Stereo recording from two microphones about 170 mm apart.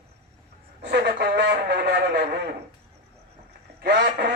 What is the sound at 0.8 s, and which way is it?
A man's voice, 90° right.